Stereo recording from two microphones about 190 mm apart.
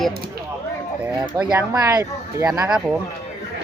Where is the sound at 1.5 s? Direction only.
20° right (ahead or behind).